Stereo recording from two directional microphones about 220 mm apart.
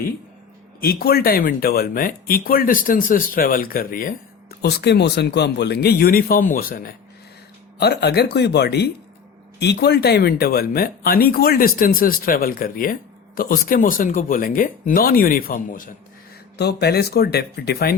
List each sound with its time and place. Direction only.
0.8 s speech: 45° left (ahead or behind)